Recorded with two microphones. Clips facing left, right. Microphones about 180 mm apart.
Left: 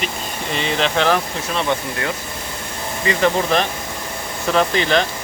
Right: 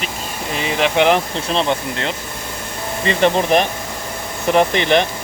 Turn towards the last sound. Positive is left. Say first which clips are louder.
# right 3 dB
turn(degrees=-20)  # may be behind; listen again after turning